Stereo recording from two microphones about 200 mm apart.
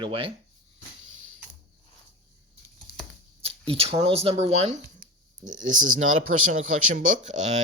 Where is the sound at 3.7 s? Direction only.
30° right (ahead or behind).